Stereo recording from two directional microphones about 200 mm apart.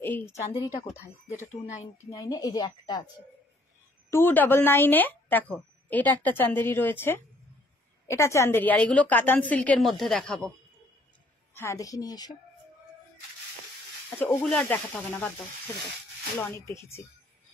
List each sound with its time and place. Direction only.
0.0 s a woman's voice: 10° left (ahead or behind)
1.8 s a woman's voice: 15° left (ahead or behind)
4.1 s a woman's voice: 10° left (ahead or behind)
11.5 s a woman's voice: 15° left (ahead or behind)
14.2 s a woman's voice: 5° left (ahead or behind)
16.3 s a woman's voice: 15° left (ahead or behind)